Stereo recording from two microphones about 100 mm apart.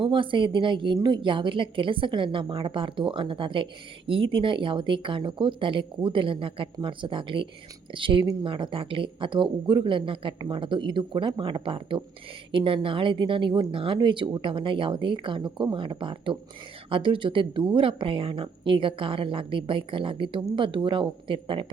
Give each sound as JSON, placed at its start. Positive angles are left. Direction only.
{"t": 0.0, "sound": "a woman's voice", "side_deg": -55}